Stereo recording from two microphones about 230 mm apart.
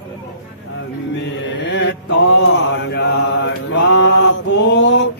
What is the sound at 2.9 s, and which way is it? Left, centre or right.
Mantra, left.